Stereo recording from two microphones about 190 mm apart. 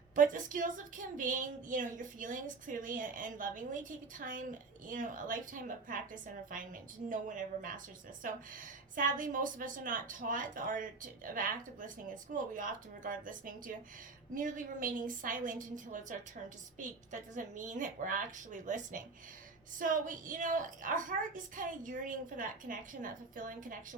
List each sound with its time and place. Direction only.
0.2 s a woman's voice: 45° right (ahead or behind)
7.1 s a woman's voice: 45° right (ahead or behind)